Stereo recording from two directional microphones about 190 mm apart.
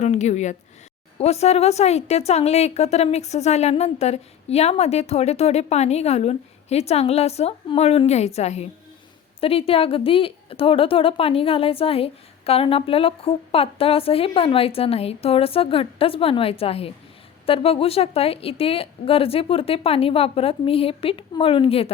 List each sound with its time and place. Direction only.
0.0 s a woman's voice: 35° left (ahead or behind)